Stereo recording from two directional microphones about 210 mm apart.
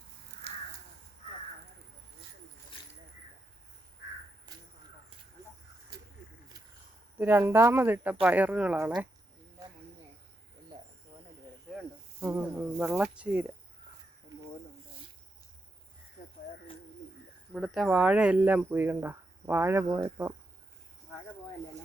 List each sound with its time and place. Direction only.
0.4 s crow: 30° right (ahead or behind)
7.2 s speech: 10° right (ahead or behind)
12.2 s speech: 10° right (ahead or behind)
17.5 s speech: centre (ahead or behind)